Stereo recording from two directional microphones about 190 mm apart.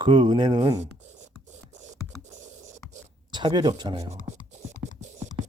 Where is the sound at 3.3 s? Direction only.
25° right (ahead or behind).